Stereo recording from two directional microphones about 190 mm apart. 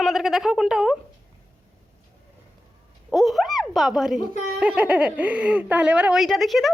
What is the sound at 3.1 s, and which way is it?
Speech, centre (ahead or behind).